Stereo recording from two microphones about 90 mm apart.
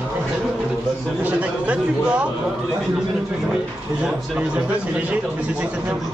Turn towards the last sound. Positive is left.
turn(degrees=-15)  # may be behind; listen again after turning